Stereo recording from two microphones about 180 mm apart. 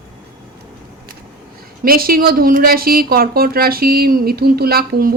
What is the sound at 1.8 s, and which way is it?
A woman's voice, 55° right (ahead or behind).